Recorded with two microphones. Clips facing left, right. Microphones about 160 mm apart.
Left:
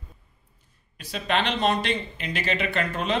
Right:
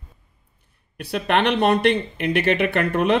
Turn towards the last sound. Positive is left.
turn(degrees=-60)  # may be behind; listen again after turning